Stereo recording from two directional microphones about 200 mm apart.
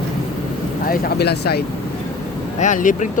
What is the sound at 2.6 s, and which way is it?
Speech, 40° left (ahead or behind).